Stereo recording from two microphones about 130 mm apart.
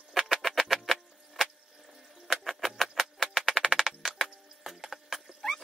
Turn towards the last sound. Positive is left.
turn(degrees=0)  # may be behind; listen again after turning